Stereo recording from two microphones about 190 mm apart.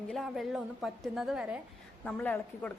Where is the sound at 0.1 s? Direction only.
Centre (ahead or behind).